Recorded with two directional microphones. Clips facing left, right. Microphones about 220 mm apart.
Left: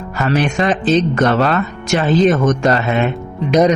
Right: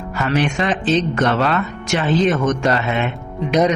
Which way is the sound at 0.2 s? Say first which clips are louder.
Left 3 dB; 40° left (ahead or behind).